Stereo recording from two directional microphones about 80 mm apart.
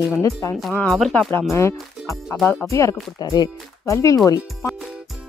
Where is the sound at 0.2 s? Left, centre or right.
Left.